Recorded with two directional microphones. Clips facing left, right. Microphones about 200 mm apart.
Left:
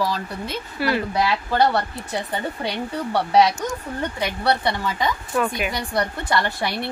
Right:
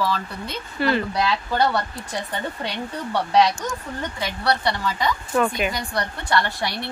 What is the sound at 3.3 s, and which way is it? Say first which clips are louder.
Speech: left 1 dB; 10° left (ahead or behind).